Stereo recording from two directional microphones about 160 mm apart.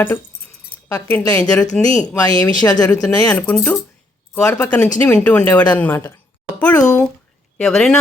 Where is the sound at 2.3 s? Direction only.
25° left (ahead or behind).